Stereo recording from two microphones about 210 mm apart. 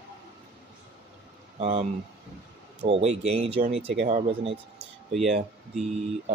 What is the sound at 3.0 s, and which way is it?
Speech, 30° right (ahead or behind).